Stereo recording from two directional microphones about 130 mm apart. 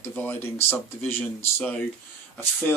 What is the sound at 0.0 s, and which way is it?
Speech, 15° left (ahead or behind).